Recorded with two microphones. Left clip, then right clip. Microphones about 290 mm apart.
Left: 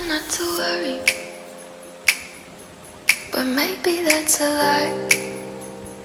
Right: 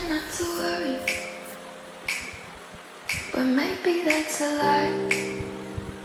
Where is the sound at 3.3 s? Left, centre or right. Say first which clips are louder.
Left 3 dB; left.